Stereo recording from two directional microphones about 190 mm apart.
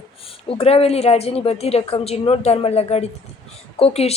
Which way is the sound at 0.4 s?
30° left (ahead or behind).